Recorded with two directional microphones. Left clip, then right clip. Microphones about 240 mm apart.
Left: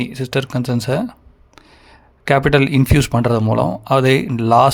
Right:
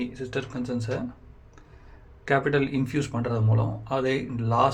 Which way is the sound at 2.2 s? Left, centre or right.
Left.